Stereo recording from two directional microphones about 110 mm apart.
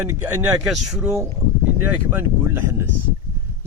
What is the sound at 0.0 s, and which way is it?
Speech, 20° right (ahead or behind).